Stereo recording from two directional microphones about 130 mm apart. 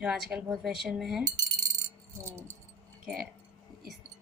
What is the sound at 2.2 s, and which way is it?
Speech, 20° right (ahead or behind).